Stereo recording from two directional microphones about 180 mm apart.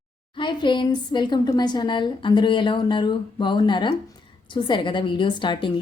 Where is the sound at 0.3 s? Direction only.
25° left (ahead or behind).